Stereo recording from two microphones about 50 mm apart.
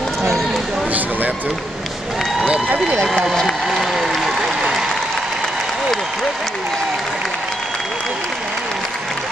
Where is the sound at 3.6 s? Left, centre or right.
Centre.